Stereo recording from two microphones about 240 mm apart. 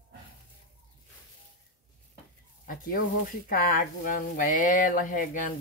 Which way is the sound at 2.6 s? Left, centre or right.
Left.